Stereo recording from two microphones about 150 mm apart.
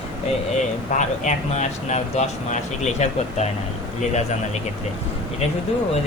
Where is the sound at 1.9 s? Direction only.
50° left (ahead or behind).